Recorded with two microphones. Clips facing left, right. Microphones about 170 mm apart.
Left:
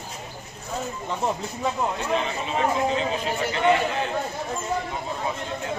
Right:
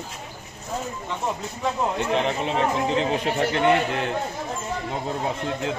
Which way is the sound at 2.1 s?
65° right (ahead or behind).